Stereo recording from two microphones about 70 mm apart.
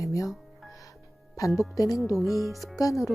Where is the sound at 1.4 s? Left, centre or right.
Left.